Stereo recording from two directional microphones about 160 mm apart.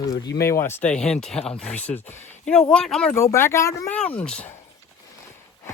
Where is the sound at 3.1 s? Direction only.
15° left (ahead or behind).